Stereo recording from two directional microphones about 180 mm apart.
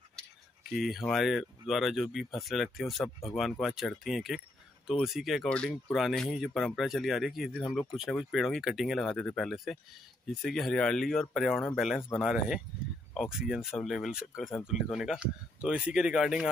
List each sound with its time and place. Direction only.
0.7 s speech: centre (ahead or behind)